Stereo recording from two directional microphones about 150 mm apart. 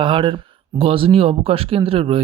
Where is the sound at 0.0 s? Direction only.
35° right (ahead or behind).